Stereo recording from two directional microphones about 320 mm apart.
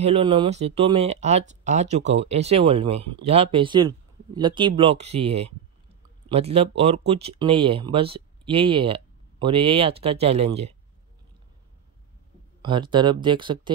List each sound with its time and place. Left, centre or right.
0.0 s speech: centre
12.6 s speech: centre